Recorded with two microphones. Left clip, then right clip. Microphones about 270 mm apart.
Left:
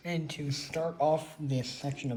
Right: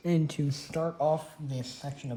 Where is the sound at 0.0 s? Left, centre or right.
Right.